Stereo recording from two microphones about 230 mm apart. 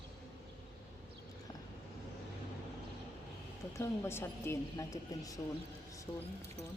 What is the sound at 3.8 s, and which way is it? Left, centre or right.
A woman's voice, centre.